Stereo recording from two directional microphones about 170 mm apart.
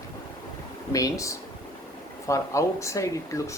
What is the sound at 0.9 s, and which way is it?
Speech, 20° left (ahead or behind).